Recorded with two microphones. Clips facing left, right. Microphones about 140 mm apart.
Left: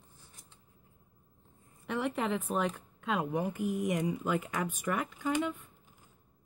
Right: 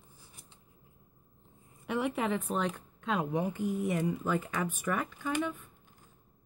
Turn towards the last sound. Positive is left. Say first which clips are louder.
# left 1 dB
turn(degrees=15)  # may be behind; listen again after turning